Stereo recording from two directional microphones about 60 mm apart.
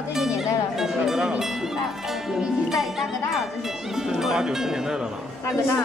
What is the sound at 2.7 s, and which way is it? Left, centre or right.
Speech, centre.